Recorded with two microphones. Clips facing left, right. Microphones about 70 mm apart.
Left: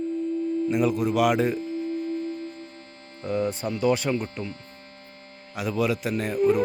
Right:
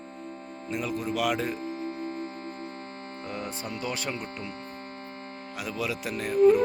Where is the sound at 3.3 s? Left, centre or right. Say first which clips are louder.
Left 10 dB; centre.